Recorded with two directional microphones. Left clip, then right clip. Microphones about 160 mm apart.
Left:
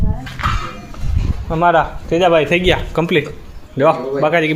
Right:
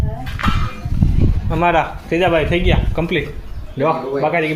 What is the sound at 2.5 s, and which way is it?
Speech, 90° left.